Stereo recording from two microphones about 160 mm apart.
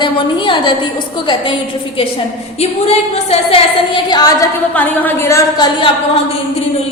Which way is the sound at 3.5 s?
30° left (ahead or behind).